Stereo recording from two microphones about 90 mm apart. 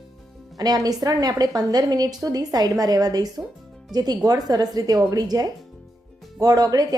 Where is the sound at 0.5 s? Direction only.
45° right (ahead or behind).